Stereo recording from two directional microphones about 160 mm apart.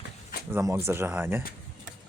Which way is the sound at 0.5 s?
15° right (ahead or behind).